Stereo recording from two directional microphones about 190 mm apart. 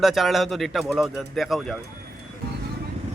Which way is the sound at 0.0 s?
Centre (ahead or behind).